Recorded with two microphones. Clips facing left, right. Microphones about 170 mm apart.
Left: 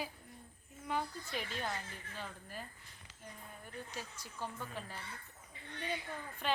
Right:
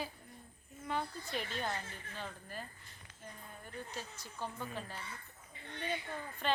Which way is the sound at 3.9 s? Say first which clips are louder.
Right 1 dB; 10° left (ahead or behind).